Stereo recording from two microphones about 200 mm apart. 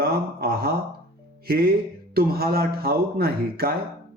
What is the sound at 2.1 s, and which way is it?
Speech, 50° right (ahead or behind).